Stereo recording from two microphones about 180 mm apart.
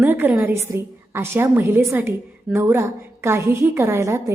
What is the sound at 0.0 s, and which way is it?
A woman's voice, 10° right (ahead or behind).